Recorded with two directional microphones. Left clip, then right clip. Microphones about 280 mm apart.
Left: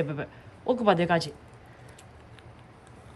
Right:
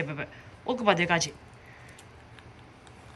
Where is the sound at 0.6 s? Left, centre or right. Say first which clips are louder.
Left 4 dB; centre.